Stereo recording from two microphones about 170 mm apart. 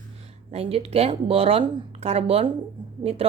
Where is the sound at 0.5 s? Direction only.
35° right (ahead or behind).